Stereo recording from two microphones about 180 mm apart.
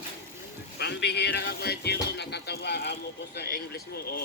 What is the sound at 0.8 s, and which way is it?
Speech, 65° left (ahead or behind).